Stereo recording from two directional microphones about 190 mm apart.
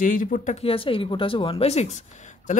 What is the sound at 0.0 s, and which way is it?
Speech, 45° left (ahead or behind).